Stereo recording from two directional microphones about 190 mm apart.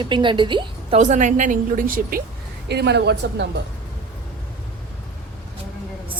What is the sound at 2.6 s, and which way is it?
Speech, 60° right (ahead or behind).